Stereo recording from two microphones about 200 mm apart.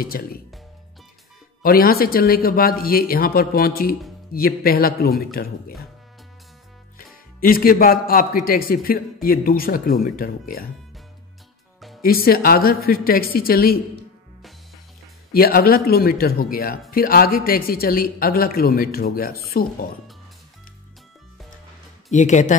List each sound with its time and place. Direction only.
0.0 s a man's voice: 45° left (ahead or behind)
1.6 s a man's voice: 45° left (ahead or behind)
7.3 s a man's voice: 45° left (ahead or behind)
12.0 s a man's voice: 45° left (ahead or behind)
15.3 s a man's voice: 45° left (ahead or behind)
22.1 s speech: 35° left (ahead or behind)